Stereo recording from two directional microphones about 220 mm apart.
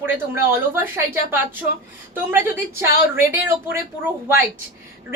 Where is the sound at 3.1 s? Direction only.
10° right (ahead or behind).